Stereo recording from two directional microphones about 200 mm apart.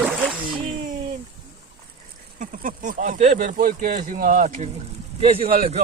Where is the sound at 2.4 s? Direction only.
40° right (ahead or behind).